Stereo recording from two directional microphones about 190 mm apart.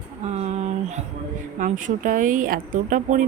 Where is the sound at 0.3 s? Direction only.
35° right (ahead or behind).